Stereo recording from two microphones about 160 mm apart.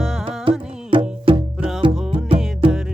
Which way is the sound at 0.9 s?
35° right (ahead or behind).